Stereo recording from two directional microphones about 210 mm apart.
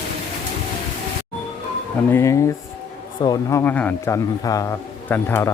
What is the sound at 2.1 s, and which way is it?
A man's voice, 15° left (ahead or behind).